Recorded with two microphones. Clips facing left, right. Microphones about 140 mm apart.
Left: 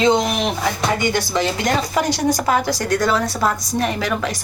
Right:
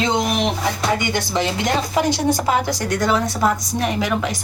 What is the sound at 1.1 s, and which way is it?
A woman's voice, 20° right (ahead or behind).